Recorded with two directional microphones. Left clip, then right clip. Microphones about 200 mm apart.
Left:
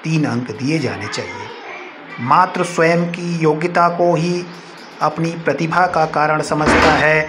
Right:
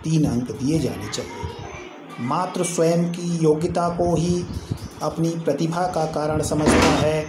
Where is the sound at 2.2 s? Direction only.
25° left (ahead or behind).